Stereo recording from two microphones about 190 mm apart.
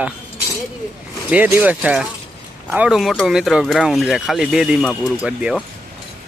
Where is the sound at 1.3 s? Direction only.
10° right (ahead or behind).